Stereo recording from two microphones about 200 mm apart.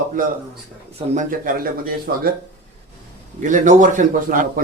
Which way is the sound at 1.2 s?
45° right (ahead or behind).